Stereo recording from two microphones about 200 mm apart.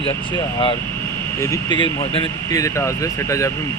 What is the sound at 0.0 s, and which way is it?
Speech, 25° left (ahead or behind).